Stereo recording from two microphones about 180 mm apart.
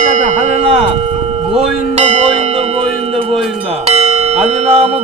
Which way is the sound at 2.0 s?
40° right (ahead or behind).